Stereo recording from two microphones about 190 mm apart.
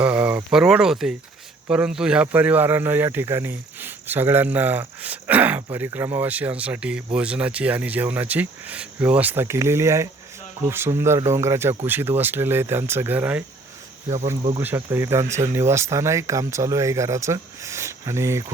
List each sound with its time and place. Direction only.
0.0 s speech: 10° right (ahead or behind)
14.6 s speech: 10° right (ahead or behind)